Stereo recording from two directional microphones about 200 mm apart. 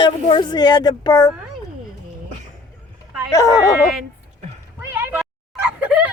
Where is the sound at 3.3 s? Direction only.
15° left (ahead or behind).